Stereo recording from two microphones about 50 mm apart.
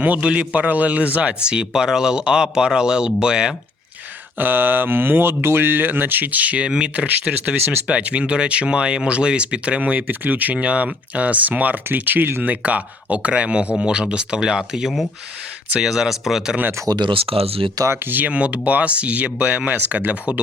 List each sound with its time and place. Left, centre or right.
0.0 s a man's voice: right
4.4 s a man's voice: right; by 16.6 s centre
16.9 s speech: right
17.9 s speech: right
18.3 s speech: right